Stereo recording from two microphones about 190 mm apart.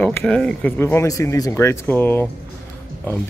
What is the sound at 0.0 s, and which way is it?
Speech, 10° left (ahead or behind).